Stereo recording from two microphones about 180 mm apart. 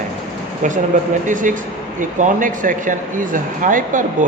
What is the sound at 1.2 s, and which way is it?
Speech, 45° right (ahead or behind).